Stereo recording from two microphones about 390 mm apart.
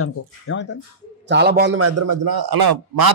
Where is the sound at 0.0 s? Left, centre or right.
Left.